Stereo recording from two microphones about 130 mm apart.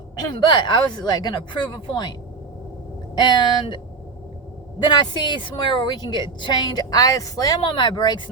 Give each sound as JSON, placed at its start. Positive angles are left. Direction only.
{"t": 0.3, "sound": "a woman's voice", "side_deg": 35}
{"t": 3.2, "sound": "a woman's voice", "side_deg": 35}
{"t": 4.8, "sound": "a woman's voice", "side_deg": 35}